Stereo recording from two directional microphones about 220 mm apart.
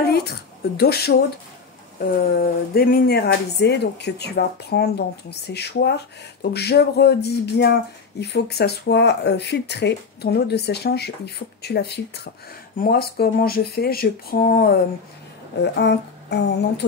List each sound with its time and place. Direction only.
0.7 s speech: 45° left (ahead or behind)